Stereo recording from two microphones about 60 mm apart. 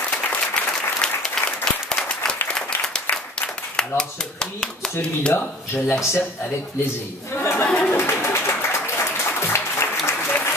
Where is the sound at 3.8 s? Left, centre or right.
Centre.